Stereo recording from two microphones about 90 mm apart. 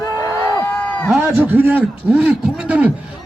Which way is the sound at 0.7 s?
20° left (ahead or behind).